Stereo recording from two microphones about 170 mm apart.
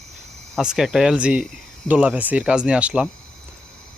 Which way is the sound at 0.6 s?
5° right (ahead or behind).